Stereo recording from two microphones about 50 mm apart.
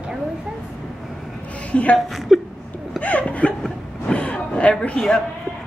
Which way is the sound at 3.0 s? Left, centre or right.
Left.